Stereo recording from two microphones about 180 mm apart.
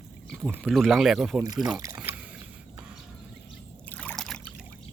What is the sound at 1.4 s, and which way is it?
Speech, 20° right (ahead or behind).